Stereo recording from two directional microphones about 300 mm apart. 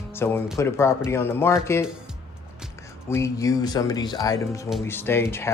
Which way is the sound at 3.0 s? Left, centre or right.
Centre.